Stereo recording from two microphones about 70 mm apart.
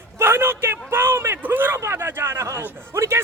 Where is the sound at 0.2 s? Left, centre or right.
Right.